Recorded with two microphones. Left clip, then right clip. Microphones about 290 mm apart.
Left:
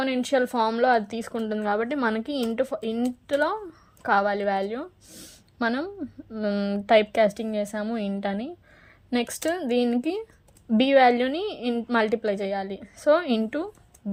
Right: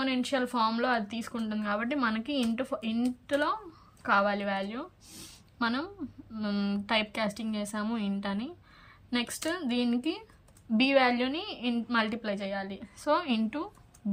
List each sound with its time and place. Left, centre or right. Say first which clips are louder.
0.0 s a woman's voice: left 6 dB; centre